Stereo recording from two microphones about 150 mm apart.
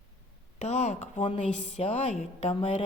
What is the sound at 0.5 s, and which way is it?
A woman's voice, 45° left (ahead or behind).